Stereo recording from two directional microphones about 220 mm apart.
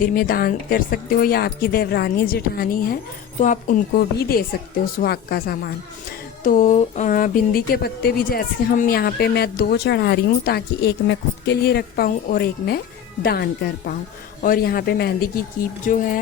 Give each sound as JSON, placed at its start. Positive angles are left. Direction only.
{"t": 0.1, "sound": "a woman's voice", "side_deg": 40}